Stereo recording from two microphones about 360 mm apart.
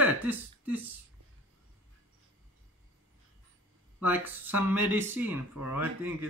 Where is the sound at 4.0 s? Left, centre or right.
Centre.